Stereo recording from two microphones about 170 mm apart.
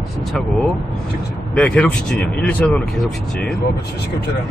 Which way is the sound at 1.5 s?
5° left (ahead or behind).